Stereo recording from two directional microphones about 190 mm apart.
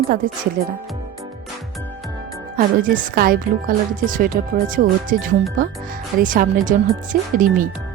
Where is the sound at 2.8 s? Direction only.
50° right (ahead or behind).